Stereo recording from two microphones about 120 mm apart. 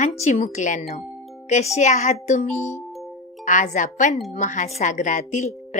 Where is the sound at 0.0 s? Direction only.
70° left (ahead or behind); by 0.9 s 90° left.